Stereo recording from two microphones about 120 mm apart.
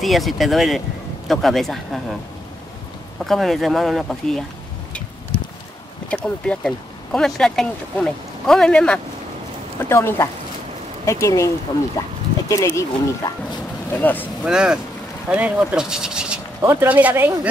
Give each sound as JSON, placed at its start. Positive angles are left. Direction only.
{"t": 0.0, "sound": "speech", "side_deg": 0}
{"t": 3.3, "sound": "speech", "side_deg": 0}
{"t": 6.0, "sound": "speech", "side_deg": 10}
{"t": 9.8, "sound": "speech", "side_deg": 20}
{"t": 13.9, "sound": "speech", "side_deg": 15}
{"t": 14.4, "sound": "speech", "side_deg": -5}